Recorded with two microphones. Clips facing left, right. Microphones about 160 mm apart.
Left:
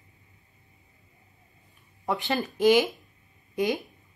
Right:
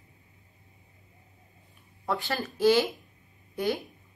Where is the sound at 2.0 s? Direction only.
20° left (ahead or behind).